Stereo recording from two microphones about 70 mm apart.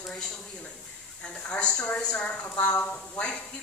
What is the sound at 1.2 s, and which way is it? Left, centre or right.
Speech, centre.